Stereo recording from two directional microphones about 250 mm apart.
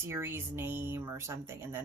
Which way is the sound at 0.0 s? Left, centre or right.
Centre.